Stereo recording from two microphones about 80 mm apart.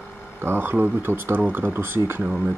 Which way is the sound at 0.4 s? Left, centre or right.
Right.